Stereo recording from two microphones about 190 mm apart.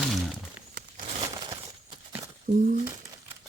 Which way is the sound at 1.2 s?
20° right (ahead or behind).